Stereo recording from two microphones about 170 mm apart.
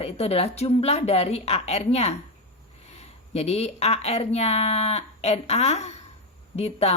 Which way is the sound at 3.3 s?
40° left (ahead or behind).